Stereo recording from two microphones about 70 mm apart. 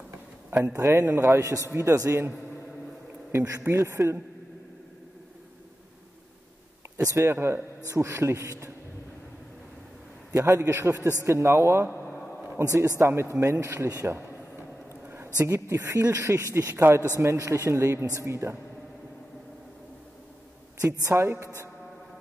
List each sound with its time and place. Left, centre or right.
0.7 s a man's voice: right
7.1 s a man's voice: right
7.3 s a man's voice: right
7.9 s a man's voice: right
10.3 s a man's voice: right
13.0 s speech: right
13.8 s a man's voice: right
15.0 s a sound: right
15.6 s a man's voice: right
21.0 s speech: right